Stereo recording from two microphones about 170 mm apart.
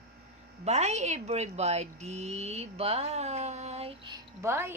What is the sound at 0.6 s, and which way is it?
Speech, 40° right (ahead or behind).